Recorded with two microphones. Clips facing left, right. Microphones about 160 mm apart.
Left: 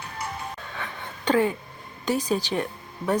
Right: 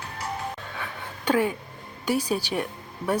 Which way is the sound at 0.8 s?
10° right (ahead or behind).